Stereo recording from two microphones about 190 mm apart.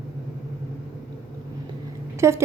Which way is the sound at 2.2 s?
15° right (ahead or behind).